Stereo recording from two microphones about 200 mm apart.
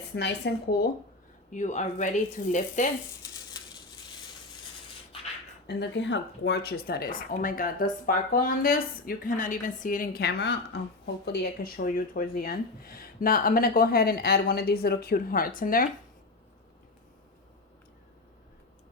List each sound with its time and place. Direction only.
0.2 s speech: 55° left (ahead or behind)
1.5 s a man's voice: 35° left (ahead or behind)
3.6 s a sound: 20° left (ahead or behind)
5.6 s speech: 60° left (ahead or behind); by 15.9 s 45° left (ahead or behind)